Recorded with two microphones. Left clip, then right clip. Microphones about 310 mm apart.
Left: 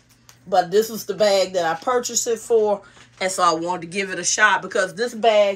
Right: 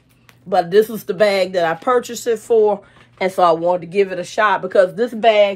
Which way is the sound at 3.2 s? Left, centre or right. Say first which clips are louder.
Right 5 dB; centre.